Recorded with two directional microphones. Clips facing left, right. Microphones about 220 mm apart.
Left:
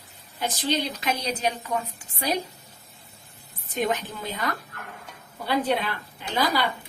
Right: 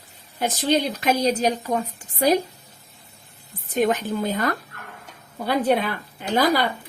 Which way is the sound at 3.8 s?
45° right (ahead or behind).